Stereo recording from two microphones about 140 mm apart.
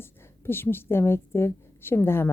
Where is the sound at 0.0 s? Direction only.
15° left (ahead or behind).